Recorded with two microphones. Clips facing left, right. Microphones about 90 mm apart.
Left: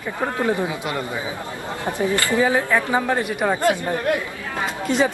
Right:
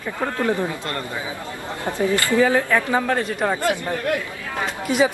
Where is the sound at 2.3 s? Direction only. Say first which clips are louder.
Right 1 dB; 20° left (ahead or behind).